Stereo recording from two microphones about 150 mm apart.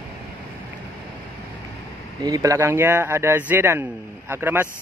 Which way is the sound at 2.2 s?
20° right (ahead or behind).